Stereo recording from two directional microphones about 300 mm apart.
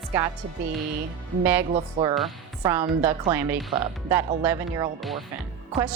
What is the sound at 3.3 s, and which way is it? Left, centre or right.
A woman's voice, centre.